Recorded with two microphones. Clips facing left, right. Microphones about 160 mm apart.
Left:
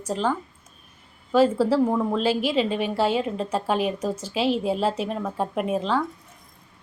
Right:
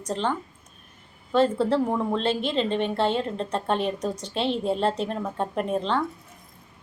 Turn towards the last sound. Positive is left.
turn(degrees=5)  # may be behind; listen again after turning